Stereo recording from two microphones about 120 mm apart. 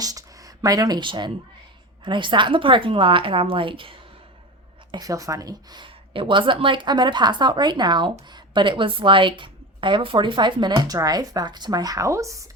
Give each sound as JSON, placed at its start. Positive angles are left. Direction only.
{"t": 0.0, "sound": "a woman's voice", "side_deg": -30}
{"t": 4.9, "sound": "a woman's voice", "side_deg": -30}